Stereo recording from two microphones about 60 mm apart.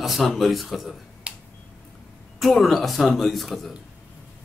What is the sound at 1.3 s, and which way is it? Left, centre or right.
Finger snapping, right.